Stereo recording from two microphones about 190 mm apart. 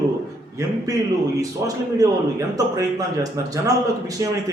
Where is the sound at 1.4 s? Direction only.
20° right (ahead or behind).